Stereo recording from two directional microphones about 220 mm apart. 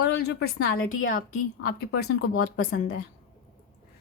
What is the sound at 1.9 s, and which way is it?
Speech, 45° left (ahead or behind).